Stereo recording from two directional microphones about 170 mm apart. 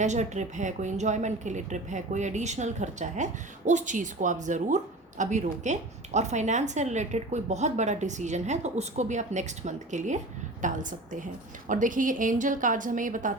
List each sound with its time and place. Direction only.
0.0 s speech: 45° right (ahead or behind)